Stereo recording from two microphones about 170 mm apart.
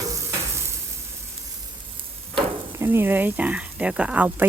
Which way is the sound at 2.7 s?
15° right (ahead or behind).